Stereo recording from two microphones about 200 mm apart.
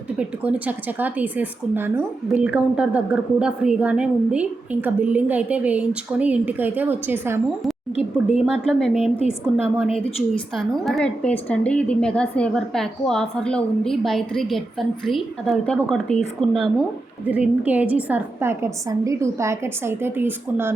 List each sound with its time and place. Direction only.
0.2 s a woman's voice: 5° right (ahead or behind)
7.9 s a woman's voice: 30° left (ahead or behind)
9.6 s a woman's voice: 10° right (ahead or behind)
10.3 s a woman's voice: 5° left (ahead or behind)